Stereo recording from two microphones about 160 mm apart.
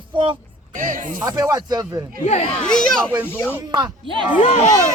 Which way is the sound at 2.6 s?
5° left (ahead or behind).